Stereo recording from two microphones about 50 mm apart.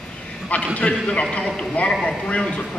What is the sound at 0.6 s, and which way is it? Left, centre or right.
A man's voice, left.